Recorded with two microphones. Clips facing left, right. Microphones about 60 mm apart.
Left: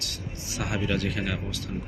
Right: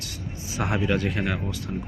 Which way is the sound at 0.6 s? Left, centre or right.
Right.